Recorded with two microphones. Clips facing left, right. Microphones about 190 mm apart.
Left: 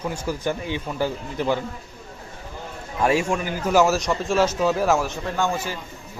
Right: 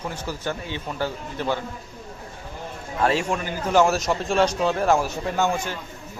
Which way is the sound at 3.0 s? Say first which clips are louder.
Left 2 dB; 10° left (ahead or behind).